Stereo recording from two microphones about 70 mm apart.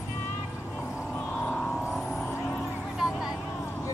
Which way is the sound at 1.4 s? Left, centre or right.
Centre.